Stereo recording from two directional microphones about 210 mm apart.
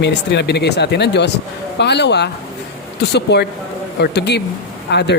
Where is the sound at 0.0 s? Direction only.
55° left (ahead or behind).